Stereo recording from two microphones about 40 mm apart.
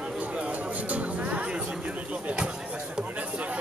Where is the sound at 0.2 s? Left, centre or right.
Right.